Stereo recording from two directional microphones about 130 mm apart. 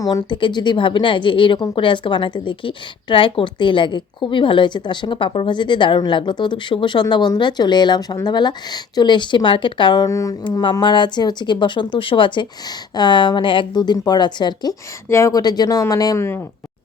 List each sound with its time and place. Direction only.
0.0 s a woman's voice: 35° left (ahead or behind)
10.4 s a woman's voice: 35° left (ahead or behind); by 16.4 s 20° left (ahead or behind)